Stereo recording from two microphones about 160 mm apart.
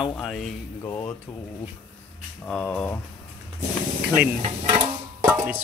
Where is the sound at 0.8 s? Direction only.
15° left (ahead or behind).